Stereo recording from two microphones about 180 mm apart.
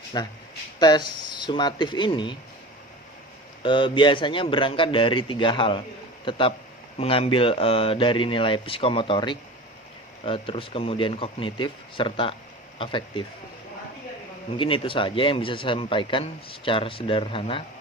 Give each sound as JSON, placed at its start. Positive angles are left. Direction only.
{"t": 0.1, "sound": "a man's voice", "side_deg": 25}
{"t": 3.6, "sound": "a man's voice", "side_deg": 30}
{"t": 14.5, "sound": "a man's voice", "side_deg": 30}